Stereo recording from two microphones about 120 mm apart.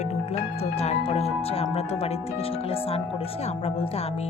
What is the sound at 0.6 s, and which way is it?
Speech, 60° left (ahead or behind).